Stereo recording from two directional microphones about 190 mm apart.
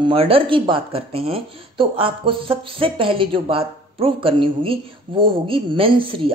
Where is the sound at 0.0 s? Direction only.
30° right (ahead or behind).